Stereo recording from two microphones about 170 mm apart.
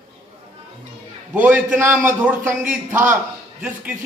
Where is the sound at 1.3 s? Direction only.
10° right (ahead or behind).